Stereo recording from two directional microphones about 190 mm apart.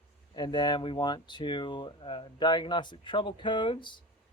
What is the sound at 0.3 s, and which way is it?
Speech, 20° left (ahead or behind).